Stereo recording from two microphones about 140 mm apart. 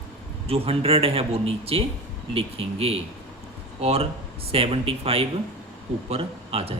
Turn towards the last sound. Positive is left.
turn(degrees=-45)  # may be behind; listen again after turning